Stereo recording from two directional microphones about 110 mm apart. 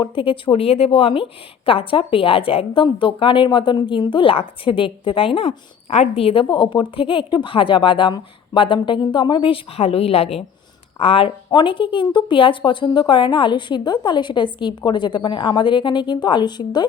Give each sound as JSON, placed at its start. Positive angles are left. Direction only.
{"t": 0.0, "sound": "a woman's voice", "side_deg": 50}
{"t": 6.4, "sound": "speech", "side_deg": 45}